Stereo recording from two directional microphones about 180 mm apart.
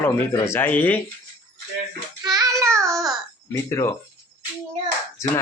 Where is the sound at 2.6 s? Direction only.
15° right (ahead or behind).